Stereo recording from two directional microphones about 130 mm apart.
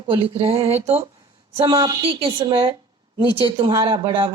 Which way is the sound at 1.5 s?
20° right (ahead or behind).